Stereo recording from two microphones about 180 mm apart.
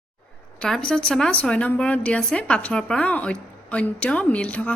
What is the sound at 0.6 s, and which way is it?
A woman's voice, 5° left (ahead or behind).